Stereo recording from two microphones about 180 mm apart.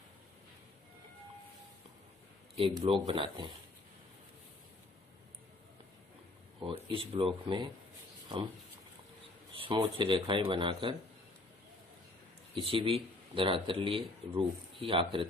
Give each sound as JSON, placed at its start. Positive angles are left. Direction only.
{"t": 2.6, "sound": "speech", "side_deg": -30}
{"t": 6.6, "sound": "speech", "side_deg": -25}
{"t": 9.6, "sound": "speech", "side_deg": -25}
{"t": 12.5, "sound": "speech", "side_deg": -30}